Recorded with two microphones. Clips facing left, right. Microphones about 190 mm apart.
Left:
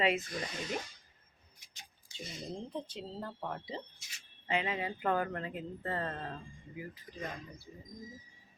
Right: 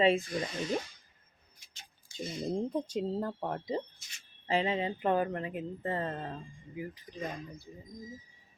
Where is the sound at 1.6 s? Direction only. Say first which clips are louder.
Even; 20° left (ahead or behind).